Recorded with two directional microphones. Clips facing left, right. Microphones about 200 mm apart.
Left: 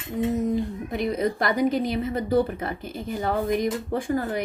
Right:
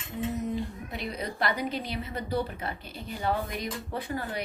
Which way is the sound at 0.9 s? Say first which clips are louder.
Left 12 dB; 50° left (ahead or behind).